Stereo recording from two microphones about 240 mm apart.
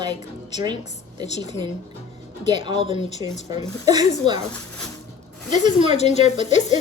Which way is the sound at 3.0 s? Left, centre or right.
Left.